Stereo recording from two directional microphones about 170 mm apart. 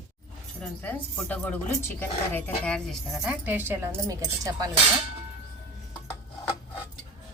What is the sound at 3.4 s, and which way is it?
Speech, 10° right (ahead or behind).